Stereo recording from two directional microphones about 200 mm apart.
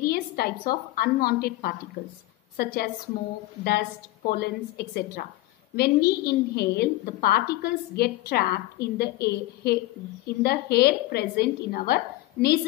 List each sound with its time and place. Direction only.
0.0 s a woman's voice: 50° left (ahead or behind)